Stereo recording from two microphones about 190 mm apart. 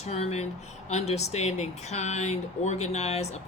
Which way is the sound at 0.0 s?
35° left (ahead or behind).